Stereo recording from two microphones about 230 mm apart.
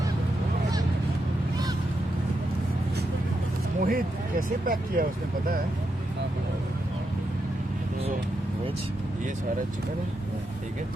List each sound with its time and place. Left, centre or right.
3.8 s speech: right